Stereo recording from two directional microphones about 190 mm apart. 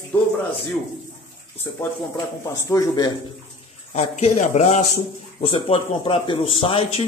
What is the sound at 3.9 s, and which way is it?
Speech, 35° left (ahead or behind).